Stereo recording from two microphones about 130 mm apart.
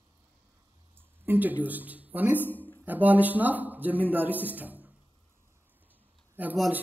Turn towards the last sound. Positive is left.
turn(degrees=-15)  # may be behind; listen again after turning